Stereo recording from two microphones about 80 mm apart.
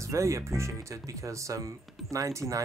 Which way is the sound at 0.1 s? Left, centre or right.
Right.